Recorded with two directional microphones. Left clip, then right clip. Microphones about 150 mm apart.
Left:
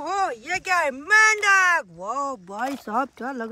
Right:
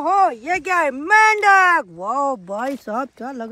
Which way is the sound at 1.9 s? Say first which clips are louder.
Right 7 dB; 20° right (ahead or behind).